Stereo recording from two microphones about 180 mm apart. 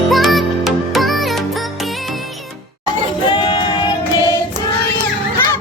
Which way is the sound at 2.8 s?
25° left (ahead or behind).